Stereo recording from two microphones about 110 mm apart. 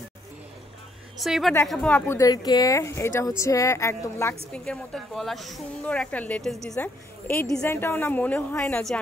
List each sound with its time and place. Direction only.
1.2 s a woman's voice: centre (ahead or behind)
1.7 s a woman's voice: 10° left (ahead or behind)
2.1 s speech: 35° left (ahead or behind)
4.5 s a woman's voice: 5° left (ahead or behind)
6.8 s a woman's voice: 15° left (ahead or behind)